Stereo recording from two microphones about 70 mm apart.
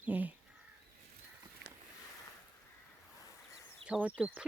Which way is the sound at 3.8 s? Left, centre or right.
Centre.